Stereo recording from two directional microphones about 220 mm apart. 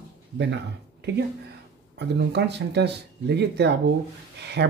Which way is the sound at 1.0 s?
50° right (ahead or behind).